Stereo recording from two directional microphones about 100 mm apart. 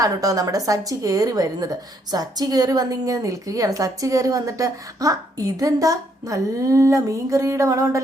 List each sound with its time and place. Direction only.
0.0 s a woman's voice: 35° right (ahead or behind)